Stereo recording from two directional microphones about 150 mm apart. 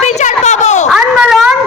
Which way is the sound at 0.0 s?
50° left (ahead or behind).